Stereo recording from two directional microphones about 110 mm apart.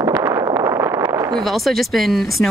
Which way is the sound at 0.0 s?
30° right (ahead or behind).